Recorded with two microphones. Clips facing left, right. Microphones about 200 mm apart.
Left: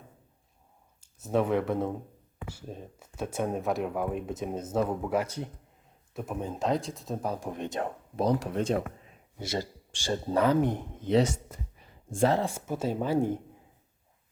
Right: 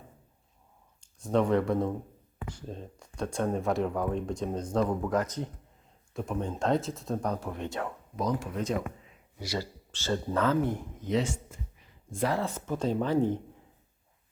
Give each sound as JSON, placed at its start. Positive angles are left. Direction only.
{"t": 1.0, "sound": "speech", "side_deg": 5}
{"t": 9.9, "sound": "speech", "side_deg": 15}
{"t": 12.1, "sound": "speech", "side_deg": 30}
{"t": 12.4, "sound": "speech", "side_deg": 10}